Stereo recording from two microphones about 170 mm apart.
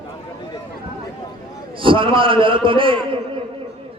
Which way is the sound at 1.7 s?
30° right (ahead or behind).